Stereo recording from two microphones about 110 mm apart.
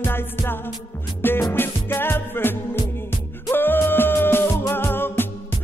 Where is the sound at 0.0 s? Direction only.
20° left (ahead or behind).